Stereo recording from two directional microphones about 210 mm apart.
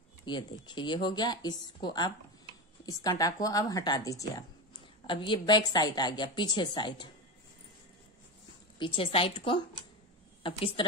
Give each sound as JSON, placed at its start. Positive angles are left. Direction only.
{"t": 0.2, "sound": "a woman's voice", "side_deg": 20}
{"t": 8.7, "sound": "a woman's voice", "side_deg": 25}